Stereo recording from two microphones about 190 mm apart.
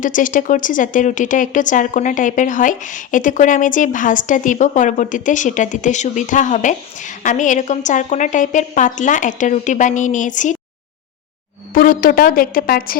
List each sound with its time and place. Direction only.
0.0 s speech: 45° left (ahead or behind)
11.7 s a woman's voice: 45° left (ahead or behind)